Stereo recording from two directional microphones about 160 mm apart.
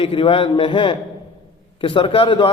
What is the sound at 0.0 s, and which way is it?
A man's voice, 35° left (ahead or behind).